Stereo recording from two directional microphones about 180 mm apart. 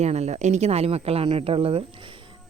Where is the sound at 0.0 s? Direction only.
40° right (ahead or behind).